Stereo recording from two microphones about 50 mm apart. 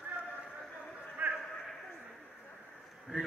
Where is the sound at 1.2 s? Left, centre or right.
Right.